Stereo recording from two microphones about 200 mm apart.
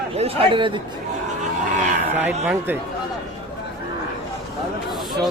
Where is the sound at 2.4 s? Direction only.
10° right (ahead or behind).